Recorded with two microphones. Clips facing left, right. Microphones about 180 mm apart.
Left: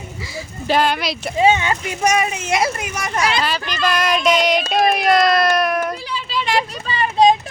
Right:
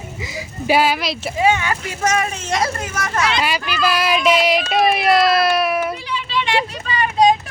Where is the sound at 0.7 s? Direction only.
5° right (ahead or behind).